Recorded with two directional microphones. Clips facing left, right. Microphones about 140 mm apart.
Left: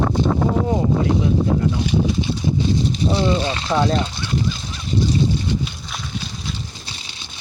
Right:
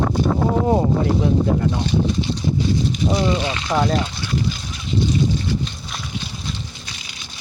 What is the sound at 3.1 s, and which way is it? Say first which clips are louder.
Speech: left 1 dB; 30° left (ahead or behind).